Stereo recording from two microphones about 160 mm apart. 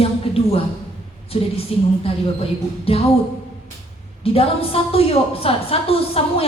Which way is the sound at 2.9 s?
35° left (ahead or behind).